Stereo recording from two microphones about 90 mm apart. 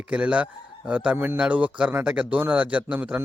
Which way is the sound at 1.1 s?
25° right (ahead or behind).